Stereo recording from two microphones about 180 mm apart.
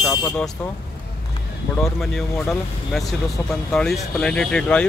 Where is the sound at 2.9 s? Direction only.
Centre (ahead or behind).